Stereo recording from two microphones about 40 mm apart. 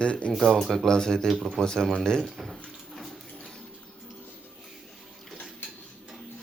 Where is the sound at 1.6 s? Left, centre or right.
Centre.